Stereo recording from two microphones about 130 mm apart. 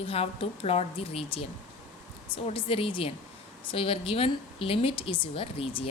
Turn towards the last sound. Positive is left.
turn(degrees=45)  # may be behind; listen again after turning